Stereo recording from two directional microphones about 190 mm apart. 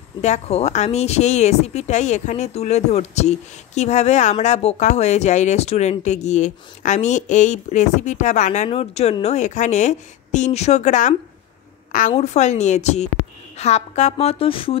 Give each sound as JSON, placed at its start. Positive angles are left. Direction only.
{"t": 0.2, "sound": "a woman's voice", "side_deg": 35}
{"t": 12.2, "sound": "a woman's voice", "side_deg": 35}